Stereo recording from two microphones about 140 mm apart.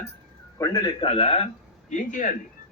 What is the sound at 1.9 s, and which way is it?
Speech, 65° left (ahead or behind).